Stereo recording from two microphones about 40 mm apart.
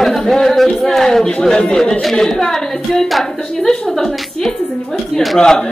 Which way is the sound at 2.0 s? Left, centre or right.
Centre.